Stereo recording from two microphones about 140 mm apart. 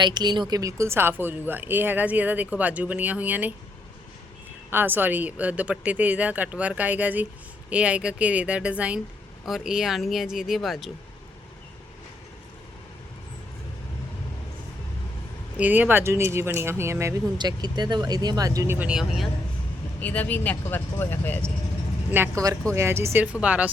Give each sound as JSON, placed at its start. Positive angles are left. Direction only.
{"t": 0.0, "sound": "speech", "side_deg": -30}
{"t": 4.7, "sound": "speech", "side_deg": -15}
{"t": 15.5, "sound": "speech", "side_deg": -10}
{"t": 17.3, "sound": "speech", "side_deg": -30}
{"t": 18.8, "sound": "speech", "side_deg": -5}
{"t": 20.0, "sound": "speech", "side_deg": 10}
{"t": 22.1, "sound": "speech", "side_deg": -20}